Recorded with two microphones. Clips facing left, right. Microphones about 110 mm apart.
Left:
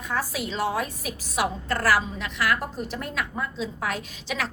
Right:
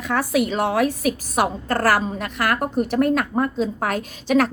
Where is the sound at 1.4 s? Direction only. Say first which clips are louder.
Right 2 dB; 45° right (ahead or behind).